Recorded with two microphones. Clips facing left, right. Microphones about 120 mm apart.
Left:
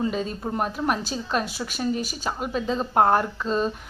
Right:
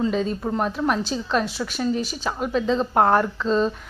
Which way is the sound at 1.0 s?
45° left (ahead or behind).